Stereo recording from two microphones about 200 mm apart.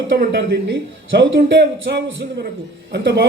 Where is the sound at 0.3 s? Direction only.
60° right (ahead or behind).